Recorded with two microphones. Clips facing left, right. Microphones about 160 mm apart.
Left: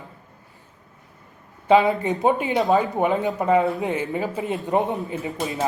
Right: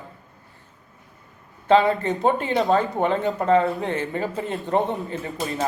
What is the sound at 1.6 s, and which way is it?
Speech, 10° left (ahead or behind).